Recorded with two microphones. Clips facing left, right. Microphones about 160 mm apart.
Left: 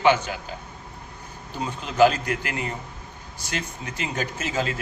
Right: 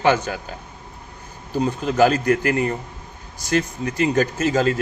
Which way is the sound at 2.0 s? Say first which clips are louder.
Right 2 dB; 45° right (ahead or behind).